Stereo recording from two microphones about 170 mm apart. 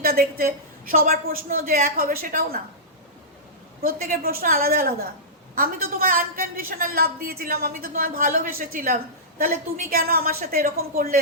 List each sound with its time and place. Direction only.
0.0 s a woman's voice: 60° right (ahead or behind)
3.8 s a woman's voice: 60° right (ahead or behind)